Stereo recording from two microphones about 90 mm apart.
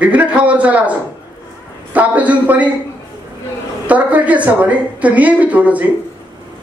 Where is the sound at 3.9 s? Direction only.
15° right (ahead or behind).